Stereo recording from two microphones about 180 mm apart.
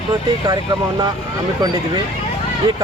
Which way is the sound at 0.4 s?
20° right (ahead or behind).